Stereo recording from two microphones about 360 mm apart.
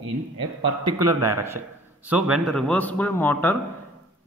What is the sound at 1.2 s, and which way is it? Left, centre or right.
A man's voice, centre.